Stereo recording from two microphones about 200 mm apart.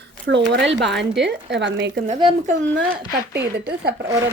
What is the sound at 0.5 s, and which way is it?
Speech, 60° right (ahead or behind).